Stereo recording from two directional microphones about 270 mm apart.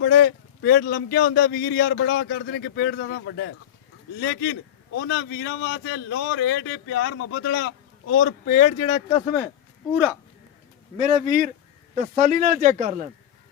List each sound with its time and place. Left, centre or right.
0.0 s a man's voice: left; by 9.2 s centre
9.9 s speech: centre
10.9 s speech: right